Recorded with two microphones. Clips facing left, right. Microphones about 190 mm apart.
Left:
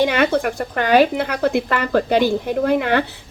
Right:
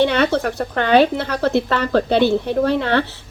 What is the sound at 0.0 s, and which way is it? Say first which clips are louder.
Speech: even; 10° left (ahead or behind).